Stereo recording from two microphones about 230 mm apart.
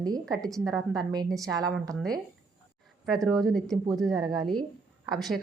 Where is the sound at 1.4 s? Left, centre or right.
Centre.